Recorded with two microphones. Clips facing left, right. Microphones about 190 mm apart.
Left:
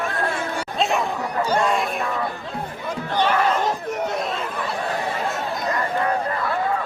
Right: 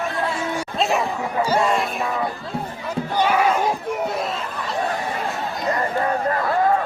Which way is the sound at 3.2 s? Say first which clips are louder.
Right 1 dB; 10° right (ahead or behind).